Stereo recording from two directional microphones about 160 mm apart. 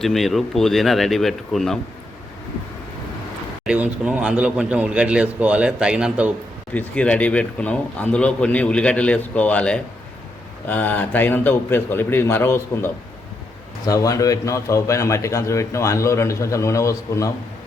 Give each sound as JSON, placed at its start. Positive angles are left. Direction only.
{"t": 0.0, "sound": "speech", "side_deg": 0}
{"t": 3.7, "sound": "a man's voice", "side_deg": -10}
{"t": 6.7, "sound": "speech", "side_deg": 5}
{"t": 13.8, "sound": "a man's voice", "side_deg": 20}